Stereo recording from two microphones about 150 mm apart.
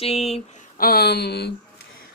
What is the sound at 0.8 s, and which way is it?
Speech, 90° left.